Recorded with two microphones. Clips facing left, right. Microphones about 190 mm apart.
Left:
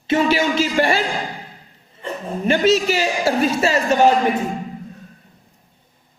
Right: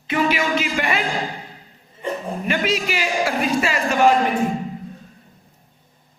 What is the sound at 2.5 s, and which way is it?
A man's voice, 30° left (ahead or behind).